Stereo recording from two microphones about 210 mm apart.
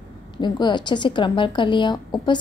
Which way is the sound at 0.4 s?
20° left (ahead or behind).